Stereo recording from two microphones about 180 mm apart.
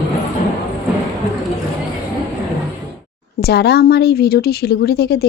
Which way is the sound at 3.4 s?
60° left (ahead or behind).